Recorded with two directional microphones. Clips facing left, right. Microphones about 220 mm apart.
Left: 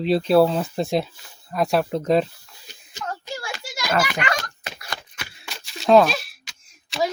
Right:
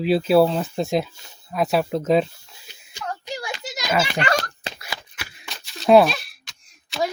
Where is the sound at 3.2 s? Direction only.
20° right (ahead or behind).